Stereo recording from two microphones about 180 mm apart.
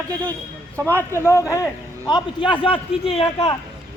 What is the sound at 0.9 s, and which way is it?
A man's voice, 10° left (ahead or behind).